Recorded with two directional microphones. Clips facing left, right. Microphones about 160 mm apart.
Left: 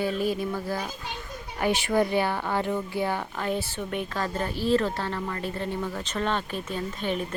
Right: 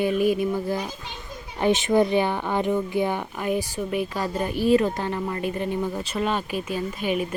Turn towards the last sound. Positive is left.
turn(degrees=-10)  # may be behind; listen again after turning